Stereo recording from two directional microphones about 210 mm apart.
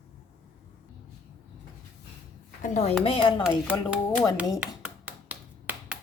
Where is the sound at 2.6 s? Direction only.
35° left (ahead or behind).